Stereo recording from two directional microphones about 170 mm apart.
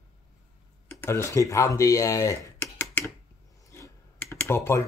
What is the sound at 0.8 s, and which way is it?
Speech, 15° left (ahead or behind).